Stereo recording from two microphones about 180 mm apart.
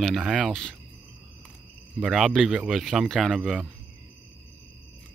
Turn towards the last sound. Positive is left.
turn(degrees=-5)  # may be behind; listen again after turning